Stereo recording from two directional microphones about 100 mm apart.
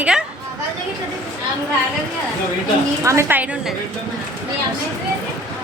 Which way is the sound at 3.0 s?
30° right (ahead or behind).